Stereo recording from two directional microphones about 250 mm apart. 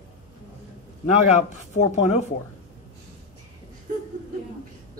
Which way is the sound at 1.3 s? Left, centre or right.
Left.